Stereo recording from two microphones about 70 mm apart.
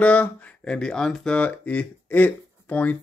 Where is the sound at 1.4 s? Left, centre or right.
Left.